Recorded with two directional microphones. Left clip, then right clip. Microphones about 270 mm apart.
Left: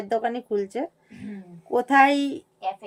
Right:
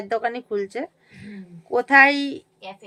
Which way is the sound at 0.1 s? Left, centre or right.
Centre.